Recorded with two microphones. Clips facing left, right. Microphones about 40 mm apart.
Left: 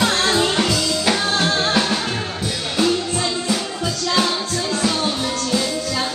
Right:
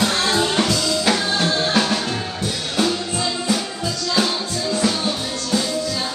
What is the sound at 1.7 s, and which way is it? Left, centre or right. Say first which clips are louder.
Music: even; centre.